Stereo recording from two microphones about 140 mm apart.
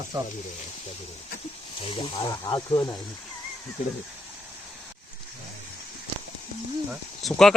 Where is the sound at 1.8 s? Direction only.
35° left (ahead or behind).